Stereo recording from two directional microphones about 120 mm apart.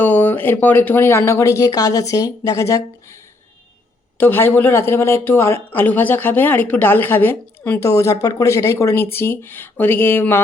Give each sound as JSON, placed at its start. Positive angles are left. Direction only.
{"t": 0.0, "sound": "speech", "side_deg": 15}
{"t": 4.2, "sound": "speech", "side_deg": 15}